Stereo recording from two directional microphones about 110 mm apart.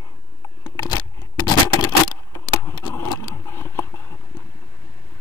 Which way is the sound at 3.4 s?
25° left (ahead or behind).